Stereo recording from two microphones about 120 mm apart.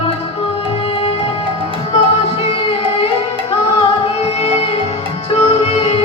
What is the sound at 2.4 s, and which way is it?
Music, 50° left (ahead or behind).